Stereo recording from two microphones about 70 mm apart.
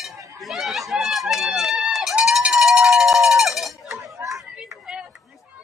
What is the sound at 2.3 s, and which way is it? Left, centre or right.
Cowbell, centre.